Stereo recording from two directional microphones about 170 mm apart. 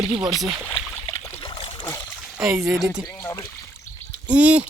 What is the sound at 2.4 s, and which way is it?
Speech, 5° right (ahead or behind).